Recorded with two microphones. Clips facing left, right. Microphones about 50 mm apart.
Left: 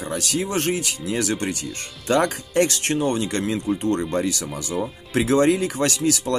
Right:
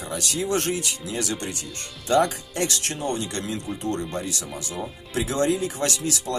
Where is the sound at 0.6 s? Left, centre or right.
Left.